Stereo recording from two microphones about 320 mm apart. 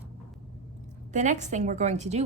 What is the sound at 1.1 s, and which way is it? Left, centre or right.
A woman's voice, right.